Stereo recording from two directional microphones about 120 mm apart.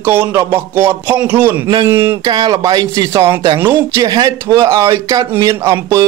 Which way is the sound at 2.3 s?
35° right (ahead or behind).